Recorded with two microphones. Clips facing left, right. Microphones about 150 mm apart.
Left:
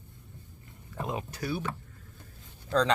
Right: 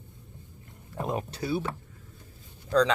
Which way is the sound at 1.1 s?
40° right (ahead or behind).